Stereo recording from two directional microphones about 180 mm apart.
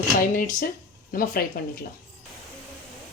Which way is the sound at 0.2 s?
50° left (ahead or behind).